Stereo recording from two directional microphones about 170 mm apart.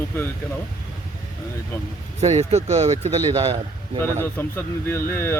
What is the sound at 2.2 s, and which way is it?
Speech, 40° right (ahead or behind).